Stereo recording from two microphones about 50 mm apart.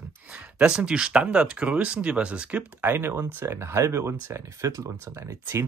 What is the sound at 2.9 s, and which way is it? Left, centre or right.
Speech, right.